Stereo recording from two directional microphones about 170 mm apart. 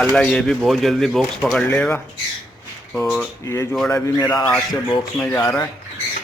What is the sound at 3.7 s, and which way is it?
Speech, 5° left (ahead or behind).